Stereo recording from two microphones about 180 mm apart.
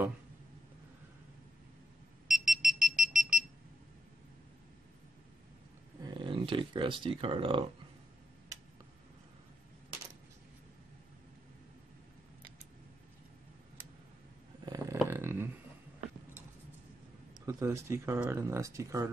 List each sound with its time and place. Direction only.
2.2 s alarm: centre (ahead or behind)
6.0 s speech: 30° right (ahead or behind)
14.6 s a sound: 20° right (ahead or behind)
17.3 s speech: 15° right (ahead or behind)